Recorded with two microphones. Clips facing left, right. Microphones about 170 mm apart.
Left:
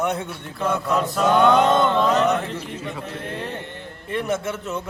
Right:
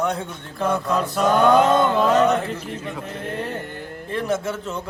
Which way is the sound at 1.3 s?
40° right (ahead or behind).